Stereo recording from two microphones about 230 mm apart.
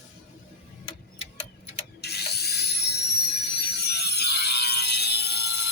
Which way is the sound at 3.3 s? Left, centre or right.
Left.